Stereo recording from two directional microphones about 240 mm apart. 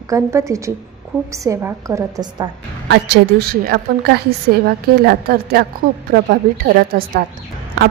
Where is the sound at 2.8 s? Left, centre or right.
Right.